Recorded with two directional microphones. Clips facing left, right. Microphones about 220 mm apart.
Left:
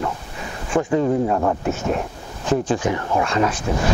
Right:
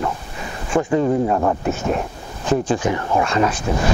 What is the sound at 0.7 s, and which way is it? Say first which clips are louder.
Speech: right 1 dB; 20° right (ahead or behind).